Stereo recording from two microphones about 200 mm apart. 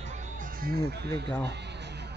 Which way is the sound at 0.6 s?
55° right (ahead or behind).